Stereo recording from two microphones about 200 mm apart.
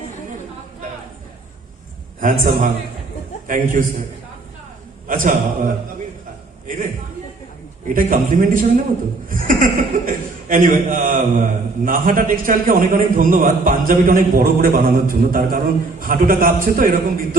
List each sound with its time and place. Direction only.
2.2 s a man's voice: 40° right (ahead or behind)
5.0 s a man's voice: 40° right (ahead or behind)
7.9 s a man's voice: 40° right (ahead or behind)